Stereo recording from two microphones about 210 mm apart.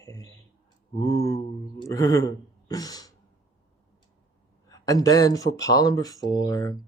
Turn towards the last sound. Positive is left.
turn(degrees=15)  # may be behind; listen again after turning